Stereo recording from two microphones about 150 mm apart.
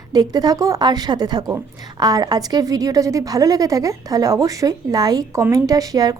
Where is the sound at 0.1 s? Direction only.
25° right (ahead or behind).